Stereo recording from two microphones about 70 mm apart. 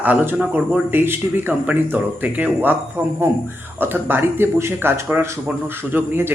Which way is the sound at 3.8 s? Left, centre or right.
Right.